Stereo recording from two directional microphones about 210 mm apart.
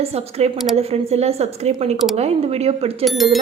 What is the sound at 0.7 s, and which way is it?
A woman's voice, 30° right (ahead or behind).